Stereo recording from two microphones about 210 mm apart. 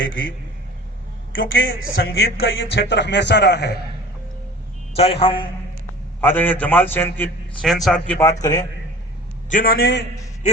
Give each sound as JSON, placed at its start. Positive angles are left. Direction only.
{"t": 0.0, "sound": "a man's voice", "side_deg": 65}
{"t": 1.5, "sound": "a man's voice", "side_deg": 70}
{"t": 2.0, "sound": "speech", "side_deg": 50}
{"t": 4.9, "sound": "a man's voice", "side_deg": 25}
{"t": 6.1, "sound": "a man's voice", "side_deg": 10}
{"t": 9.5, "sound": "speech", "side_deg": 40}